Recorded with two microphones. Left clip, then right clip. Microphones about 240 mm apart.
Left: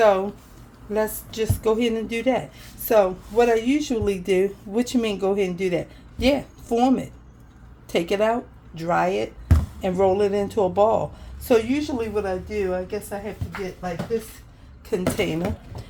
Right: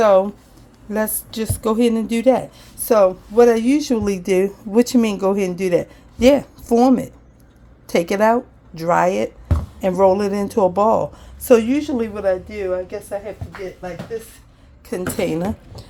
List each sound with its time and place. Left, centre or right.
0.0 s a woman's voice: right
8.1 s a woman's voice: right
14.8 s a woman's voice: right